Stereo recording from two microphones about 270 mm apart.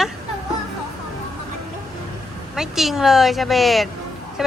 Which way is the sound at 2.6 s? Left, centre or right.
Centre.